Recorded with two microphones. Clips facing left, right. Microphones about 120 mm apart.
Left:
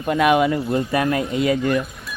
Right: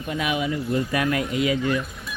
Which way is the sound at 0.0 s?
55° left (ahead or behind).